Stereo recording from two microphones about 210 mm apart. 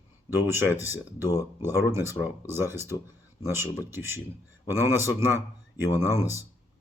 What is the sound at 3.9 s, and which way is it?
A man's voice, 10° right (ahead or behind).